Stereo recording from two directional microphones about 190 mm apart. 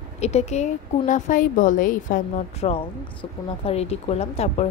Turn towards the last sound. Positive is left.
turn(degrees=35)  # may be behind; listen again after turning